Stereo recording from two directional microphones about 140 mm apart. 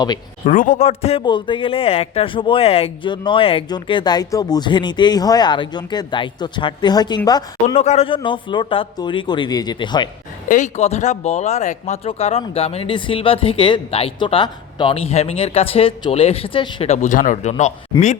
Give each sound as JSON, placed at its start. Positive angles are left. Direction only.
{"t": 0.4, "sound": "a man's voice", "side_deg": 70}
{"t": 0.9, "sound": "speech", "side_deg": 45}
{"t": 7.8, "sound": "speech", "side_deg": 45}
{"t": 10.5, "sound": "speech", "side_deg": 55}
{"t": 16.8, "sound": "speech", "side_deg": 55}